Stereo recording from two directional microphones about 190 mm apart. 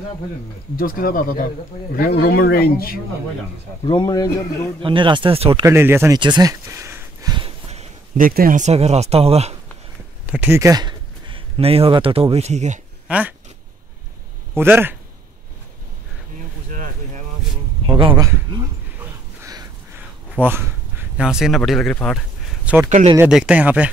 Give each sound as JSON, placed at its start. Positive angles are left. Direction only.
{"t": 0.7, "sound": "speech", "side_deg": 50}
{"t": 3.8, "sound": "speech", "side_deg": 25}
{"t": 4.8, "sound": "speech", "side_deg": -25}
{"t": 5.7, "sound": "speech", "side_deg": -10}
{"t": 6.1, "sound": "a sound", "side_deg": -20}
{"t": 8.2, "sound": "speech", "side_deg": -50}
{"t": 10.2, "sound": "speech", "side_deg": -10}
{"t": 13.1, "sound": "speech", "side_deg": -5}
{"t": 14.5, "sound": "speech", "side_deg": -10}
{"t": 16.3, "sound": "a sound", "side_deg": -45}
{"t": 17.8, "sound": "a sound", "side_deg": -25}
{"t": 20.3, "sound": "speech", "side_deg": -10}
{"t": 22.8, "sound": "speech", "side_deg": -40}
{"t": 23.1, "sound": "speech", "side_deg": -5}